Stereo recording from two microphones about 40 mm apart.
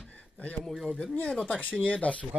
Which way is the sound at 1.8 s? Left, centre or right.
Left.